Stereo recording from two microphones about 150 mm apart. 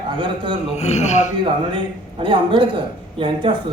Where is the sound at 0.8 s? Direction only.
45° left (ahead or behind).